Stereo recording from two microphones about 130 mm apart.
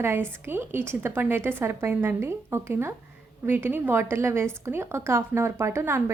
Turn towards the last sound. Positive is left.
turn(degrees=-20)  # may be behind; listen again after turning